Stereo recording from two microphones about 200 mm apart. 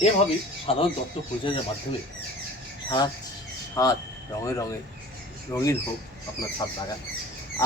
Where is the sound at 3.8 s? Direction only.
15° left (ahead or behind).